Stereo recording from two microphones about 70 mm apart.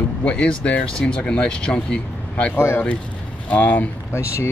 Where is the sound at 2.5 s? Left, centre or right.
Left.